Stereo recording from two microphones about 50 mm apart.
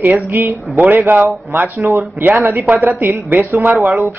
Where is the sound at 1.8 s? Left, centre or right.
Right.